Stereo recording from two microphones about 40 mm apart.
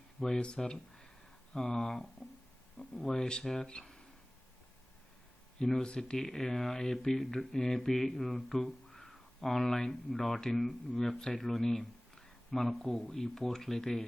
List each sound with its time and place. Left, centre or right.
0.3 s speech: left
5.6 s speech: centre